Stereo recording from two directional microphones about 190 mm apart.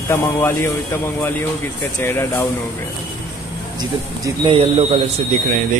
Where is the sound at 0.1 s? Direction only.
15° left (ahead or behind).